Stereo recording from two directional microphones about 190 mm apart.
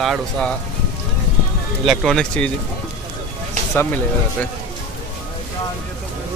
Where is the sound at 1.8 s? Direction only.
5° left (ahead or behind).